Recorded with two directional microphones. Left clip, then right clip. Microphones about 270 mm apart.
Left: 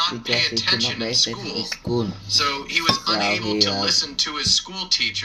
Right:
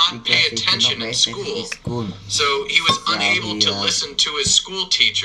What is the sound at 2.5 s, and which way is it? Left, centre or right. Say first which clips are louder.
Speech: right 4 dB; right.